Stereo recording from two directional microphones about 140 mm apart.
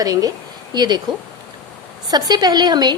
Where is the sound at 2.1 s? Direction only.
30° right (ahead or behind).